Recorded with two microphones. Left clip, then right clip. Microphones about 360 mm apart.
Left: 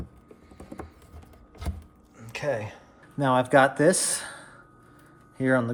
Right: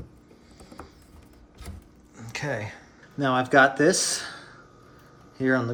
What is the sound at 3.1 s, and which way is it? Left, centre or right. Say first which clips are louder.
Speech: right 1 dB; centre.